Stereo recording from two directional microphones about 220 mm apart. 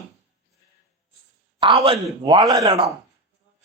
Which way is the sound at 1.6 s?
25° right (ahead or behind).